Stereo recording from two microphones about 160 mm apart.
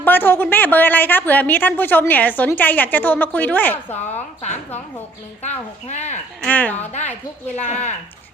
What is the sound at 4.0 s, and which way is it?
Speech, 45° left (ahead or behind).